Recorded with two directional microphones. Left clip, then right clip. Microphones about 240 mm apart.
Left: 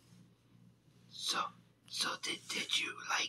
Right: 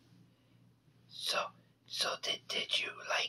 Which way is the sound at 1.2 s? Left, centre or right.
Right.